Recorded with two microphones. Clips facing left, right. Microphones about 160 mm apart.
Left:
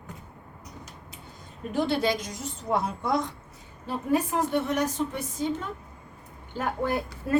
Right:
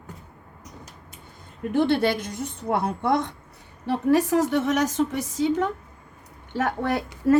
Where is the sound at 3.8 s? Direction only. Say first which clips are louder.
Right 6 dB; 75° right (ahead or behind).